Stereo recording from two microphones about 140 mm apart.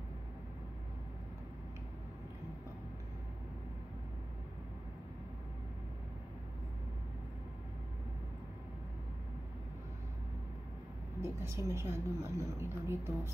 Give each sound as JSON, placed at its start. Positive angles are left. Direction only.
{"t": 11.1, "sound": "a woman's voice", "side_deg": -20}